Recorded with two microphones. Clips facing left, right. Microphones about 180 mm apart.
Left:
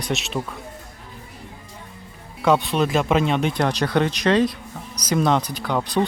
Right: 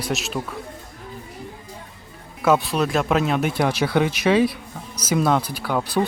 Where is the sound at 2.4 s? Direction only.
5° right (ahead or behind).